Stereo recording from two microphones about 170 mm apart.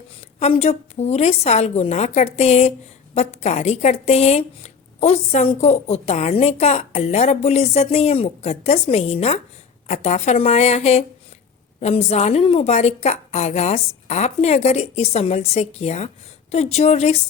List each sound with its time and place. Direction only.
0.3 s speech: 40° left (ahead or behind)